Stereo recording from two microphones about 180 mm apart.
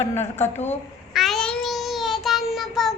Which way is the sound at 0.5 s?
40° left (ahead or behind).